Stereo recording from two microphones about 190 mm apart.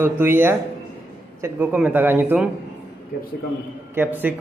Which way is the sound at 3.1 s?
55° left (ahead or behind).